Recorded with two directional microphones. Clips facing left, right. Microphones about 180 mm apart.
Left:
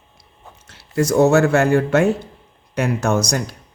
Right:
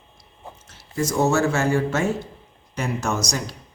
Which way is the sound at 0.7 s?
65° left (ahead or behind).